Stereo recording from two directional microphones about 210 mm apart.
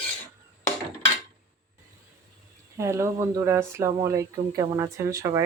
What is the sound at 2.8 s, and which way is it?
Speech, 15° right (ahead or behind).